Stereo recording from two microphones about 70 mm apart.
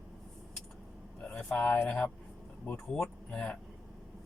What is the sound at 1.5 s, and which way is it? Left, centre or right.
Speech, left.